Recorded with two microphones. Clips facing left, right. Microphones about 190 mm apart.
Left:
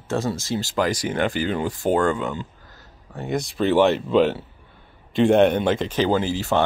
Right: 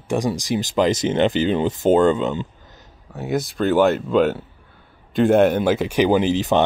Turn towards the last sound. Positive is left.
turn(degrees=-20)  # may be behind; listen again after turning